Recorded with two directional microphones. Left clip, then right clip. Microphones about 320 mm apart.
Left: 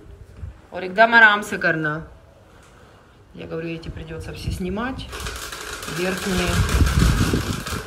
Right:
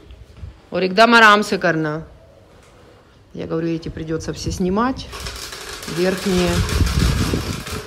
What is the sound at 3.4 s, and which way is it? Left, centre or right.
A man's voice, centre.